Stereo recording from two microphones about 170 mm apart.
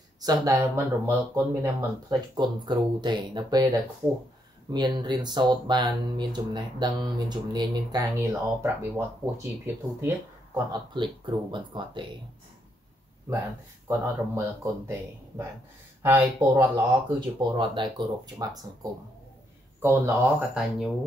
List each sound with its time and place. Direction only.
0.2 s speech: 20° right (ahead or behind)
13.8 s speech: 15° right (ahead or behind)
17.4 s speech: 30° right (ahead or behind)
19.8 s speech: 15° right (ahead or behind)